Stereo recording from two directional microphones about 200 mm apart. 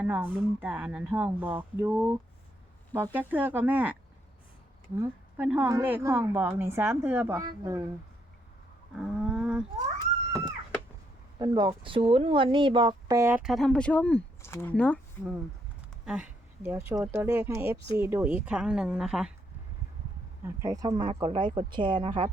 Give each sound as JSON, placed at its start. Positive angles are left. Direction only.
{"t": 0.0, "sound": "speech", "side_deg": -10}
{"t": 4.9, "sound": "speech", "side_deg": -10}
{"t": 9.0, "sound": "wild animals", "side_deg": -5}
{"t": 11.3, "sound": "speech", "side_deg": -20}
{"t": 16.0, "sound": "a woman's voice", "side_deg": -5}
{"t": 20.4, "sound": "speech", "side_deg": -15}